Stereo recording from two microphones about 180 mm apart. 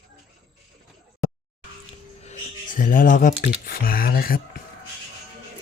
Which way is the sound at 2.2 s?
45° left (ahead or behind).